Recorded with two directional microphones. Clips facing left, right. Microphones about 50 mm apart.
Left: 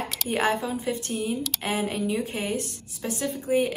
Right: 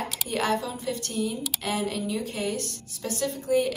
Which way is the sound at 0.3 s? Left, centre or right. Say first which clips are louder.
Left 2 dB; left.